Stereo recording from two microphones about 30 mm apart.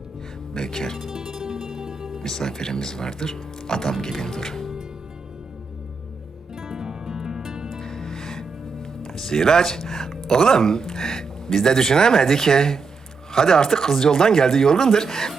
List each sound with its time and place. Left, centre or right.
0.5 s speech: centre
1.1 s music: right
2.2 s speech: centre
6.6 s music: centre
7.8 s music: centre
10.2 s speech: centre